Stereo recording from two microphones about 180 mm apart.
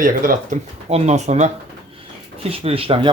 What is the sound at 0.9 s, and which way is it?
Speech, 35° right (ahead or behind).